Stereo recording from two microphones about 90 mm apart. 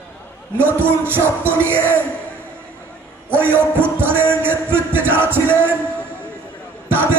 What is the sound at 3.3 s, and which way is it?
A man's voice, 25° right (ahead or behind).